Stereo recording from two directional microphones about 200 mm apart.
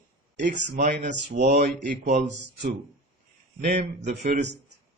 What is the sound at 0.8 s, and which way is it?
A man's voice, 40° right (ahead or behind).